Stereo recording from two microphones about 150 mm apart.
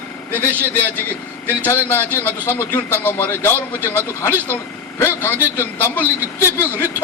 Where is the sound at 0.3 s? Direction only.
15° right (ahead or behind).